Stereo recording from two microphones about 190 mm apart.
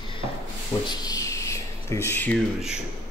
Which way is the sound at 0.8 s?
20° left (ahead or behind).